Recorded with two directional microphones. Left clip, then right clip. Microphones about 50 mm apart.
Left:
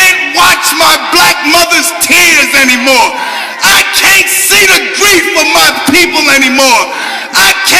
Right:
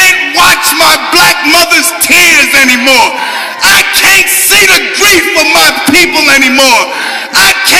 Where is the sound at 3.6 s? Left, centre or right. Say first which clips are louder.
Right 1 dB; right.